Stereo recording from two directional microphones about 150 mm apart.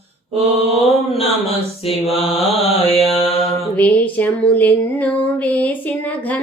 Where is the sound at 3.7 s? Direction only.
10° left (ahead or behind).